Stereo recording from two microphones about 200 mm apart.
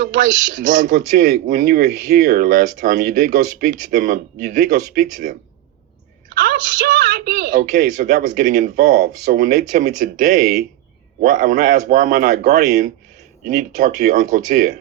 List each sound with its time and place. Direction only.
0.0 s speech: 40° right (ahead or behind)
6.4 s speech: 45° right (ahead or behind)